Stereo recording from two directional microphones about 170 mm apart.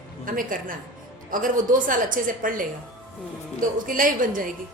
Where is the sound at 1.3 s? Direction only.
55° right (ahead or behind).